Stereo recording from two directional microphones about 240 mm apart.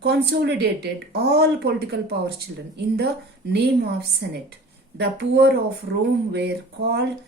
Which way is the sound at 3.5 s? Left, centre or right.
Right.